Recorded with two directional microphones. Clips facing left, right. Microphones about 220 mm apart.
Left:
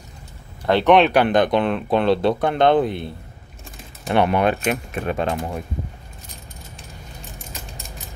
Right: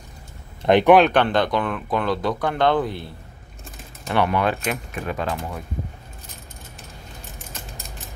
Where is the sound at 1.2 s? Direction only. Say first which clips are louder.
Left 4 dB; 20° left (ahead or behind).